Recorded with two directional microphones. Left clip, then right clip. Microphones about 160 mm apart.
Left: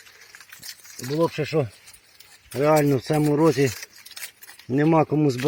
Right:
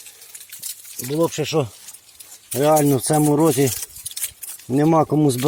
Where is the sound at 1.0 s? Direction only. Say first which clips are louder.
Right 3 dB; 15° right (ahead or behind).